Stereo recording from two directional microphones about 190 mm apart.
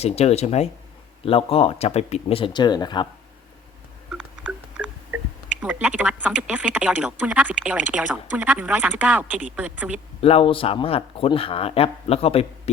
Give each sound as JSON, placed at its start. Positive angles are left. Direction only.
{"t": 0.0, "sound": "speech", "side_deg": 35}
{"t": 5.6, "sound": "speech", "side_deg": -5}
{"t": 10.2, "sound": "speech", "side_deg": 30}